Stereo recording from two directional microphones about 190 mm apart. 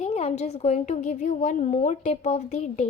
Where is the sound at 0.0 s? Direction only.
35° left (ahead or behind).